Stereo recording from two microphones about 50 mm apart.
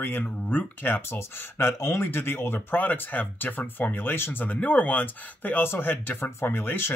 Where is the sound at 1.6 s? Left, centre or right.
Left.